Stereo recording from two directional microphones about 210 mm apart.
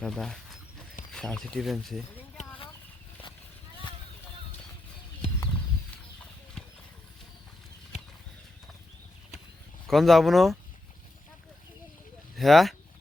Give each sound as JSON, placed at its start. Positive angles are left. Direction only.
{"t": 0.0, "sound": "speech", "side_deg": 0}
{"t": 7.9, "sound": "horse", "side_deg": 30}
{"t": 9.8, "sound": "speech", "side_deg": 0}
{"t": 12.4, "sound": "speech", "side_deg": 0}